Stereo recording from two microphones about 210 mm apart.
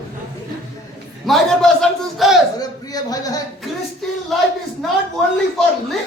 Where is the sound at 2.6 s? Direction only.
20° left (ahead or behind).